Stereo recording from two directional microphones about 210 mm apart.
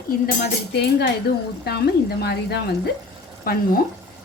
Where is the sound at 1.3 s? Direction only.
50° left (ahead or behind).